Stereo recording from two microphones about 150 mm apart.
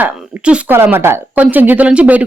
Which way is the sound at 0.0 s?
10° right (ahead or behind).